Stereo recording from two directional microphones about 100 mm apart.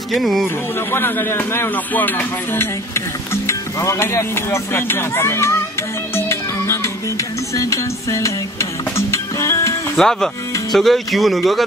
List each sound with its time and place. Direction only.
0.1 s speech: centre (ahead or behind)
0.7 s speech: 25° left (ahead or behind)
6.1 s music: 25° left (ahead or behind)
9.9 s speech: 5° left (ahead or behind)